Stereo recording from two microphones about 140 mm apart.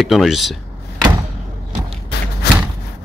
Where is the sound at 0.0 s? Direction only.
Centre (ahead or behind).